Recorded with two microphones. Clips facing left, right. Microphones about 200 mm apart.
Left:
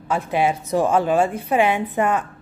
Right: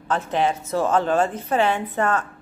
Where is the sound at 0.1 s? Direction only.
10° left (ahead or behind).